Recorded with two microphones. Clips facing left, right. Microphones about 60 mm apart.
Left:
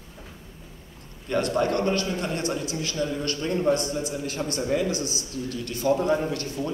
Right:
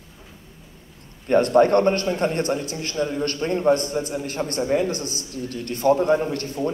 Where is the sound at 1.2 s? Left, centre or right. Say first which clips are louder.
Right 8 dB; right.